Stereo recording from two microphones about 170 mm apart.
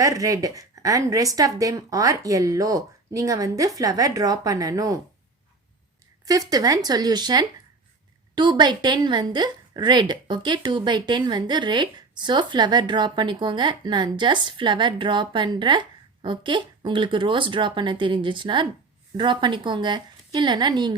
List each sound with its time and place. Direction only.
0.0 s a woman's voice: 20° right (ahead or behind)
6.2 s a woman's voice: 20° right (ahead or behind)